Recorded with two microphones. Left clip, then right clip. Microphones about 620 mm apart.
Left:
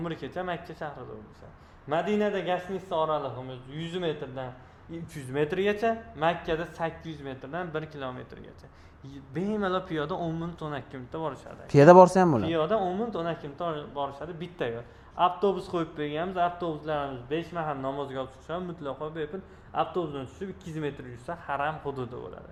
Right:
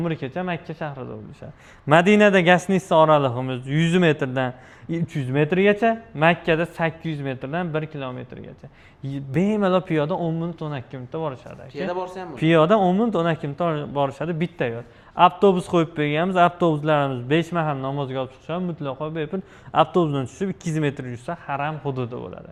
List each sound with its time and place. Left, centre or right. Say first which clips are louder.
0.0 s a man's voice: right 6 dB; right
1.9 s a man's voice: right 12 dB; right
4.9 s a man's voice: right 11 dB; right
11.7 s speech: left 13 dB; left
12.4 s a man's voice: right 10 dB; right